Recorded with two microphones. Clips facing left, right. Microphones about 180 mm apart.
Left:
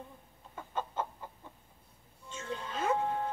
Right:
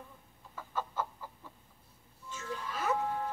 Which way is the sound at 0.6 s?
25° left (ahead or behind).